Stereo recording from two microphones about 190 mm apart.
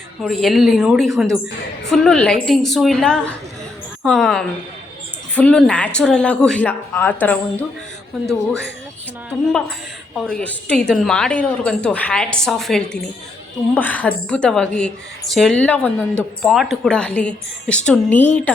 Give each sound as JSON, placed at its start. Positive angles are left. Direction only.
{"t": 0.2, "sound": "a woman's voice", "side_deg": 0}
{"t": 10.2, "sound": "a woman's voice", "side_deg": 5}